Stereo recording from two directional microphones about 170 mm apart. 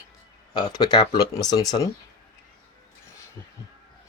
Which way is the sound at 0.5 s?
25° left (ahead or behind).